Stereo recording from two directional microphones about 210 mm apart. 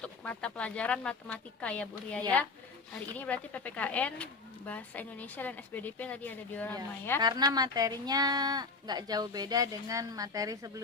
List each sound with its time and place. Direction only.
0.0 s speech: 5° left (ahead or behind)
7.2 s speech: 20° right (ahead or behind)